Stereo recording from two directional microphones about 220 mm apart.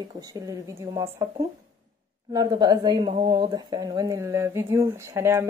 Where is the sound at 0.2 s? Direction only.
15° right (ahead or behind).